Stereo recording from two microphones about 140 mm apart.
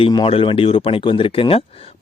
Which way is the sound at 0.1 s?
35° left (ahead or behind).